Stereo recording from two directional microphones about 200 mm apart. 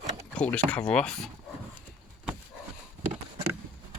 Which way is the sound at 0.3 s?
5° left (ahead or behind).